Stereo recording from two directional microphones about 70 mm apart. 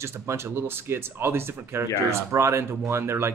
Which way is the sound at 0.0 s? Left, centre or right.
Right.